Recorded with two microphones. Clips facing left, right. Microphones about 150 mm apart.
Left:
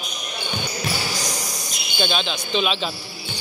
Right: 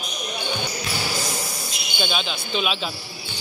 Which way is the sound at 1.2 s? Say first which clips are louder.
Right 1 dB; 30° right (ahead or behind).